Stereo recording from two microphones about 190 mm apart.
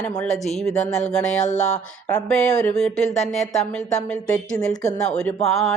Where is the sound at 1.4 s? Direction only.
40° left (ahead or behind).